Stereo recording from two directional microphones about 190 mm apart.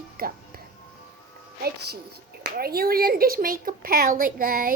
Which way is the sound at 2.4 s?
55° right (ahead or behind).